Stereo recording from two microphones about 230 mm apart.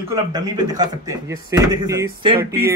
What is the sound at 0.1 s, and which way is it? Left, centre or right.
Speech, centre.